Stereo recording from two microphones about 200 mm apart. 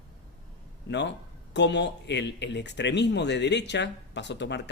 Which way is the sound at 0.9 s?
60° left (ahead or behind).